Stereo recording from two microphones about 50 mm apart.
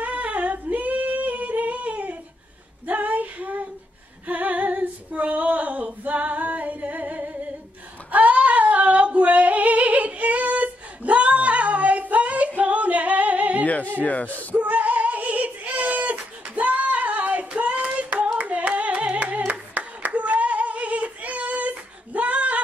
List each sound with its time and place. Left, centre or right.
0.0 s singing: right
2.9 s a sound: right
4.3 s female singing: right
13.7 s a sound: left
14.5 s female singing: right
17.6 s hands: right